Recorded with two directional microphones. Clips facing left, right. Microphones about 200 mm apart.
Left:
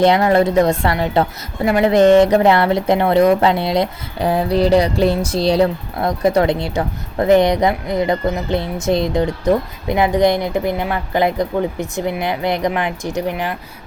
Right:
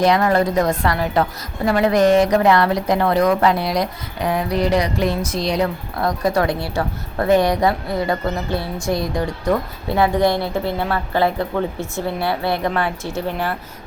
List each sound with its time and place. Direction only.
0.0 s a woman's voice: 25° left (ahead or behind)